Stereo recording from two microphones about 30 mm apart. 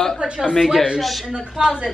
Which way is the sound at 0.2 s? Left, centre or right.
Right.